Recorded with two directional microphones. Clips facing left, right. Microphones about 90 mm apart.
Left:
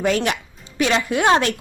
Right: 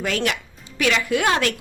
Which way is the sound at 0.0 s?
25° left (ahead or behind).